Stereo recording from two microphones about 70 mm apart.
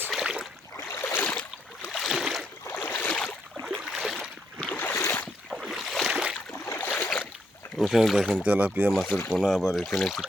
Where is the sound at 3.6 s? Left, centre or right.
Centre.